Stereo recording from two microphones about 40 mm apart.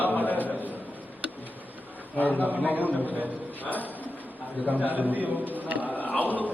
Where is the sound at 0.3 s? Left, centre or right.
Left.